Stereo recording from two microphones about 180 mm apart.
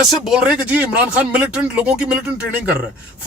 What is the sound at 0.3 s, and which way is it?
Speech, 5° right (ahead or behind).